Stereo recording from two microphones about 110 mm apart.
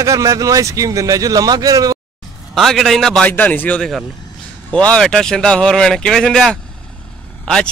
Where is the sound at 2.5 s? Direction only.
Centre (ahead or behind).